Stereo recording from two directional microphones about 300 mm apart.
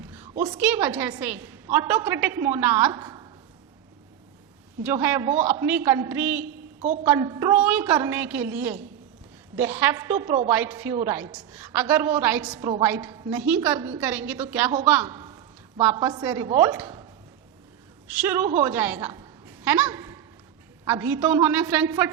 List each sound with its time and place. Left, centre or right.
0.0 s a sound: centre
0.5 s a woman's voice: centre
4.8 s a woman's voice: centre
6.4 s a woman's voice: right
7.1 s a woman's voice: centre
9.7 s a woman's voice: centre
18.1 s a woman's voice: centre